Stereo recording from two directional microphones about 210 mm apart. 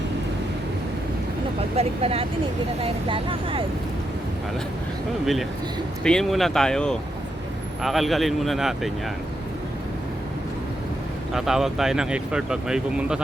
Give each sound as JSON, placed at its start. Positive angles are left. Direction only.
{"t": 1.7, "sound": "speech", "side_deg": -30}
{"t": 5.2, "sound": "speech", "side_deg": 0}
{"t": 11.3, "sound": "speech", "side_deg": 0}